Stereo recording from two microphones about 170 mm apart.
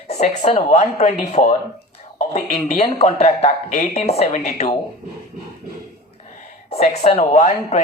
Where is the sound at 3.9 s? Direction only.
35° left (ahead or behind).